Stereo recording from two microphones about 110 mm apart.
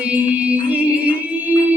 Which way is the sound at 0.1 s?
15° right (ahead or behind).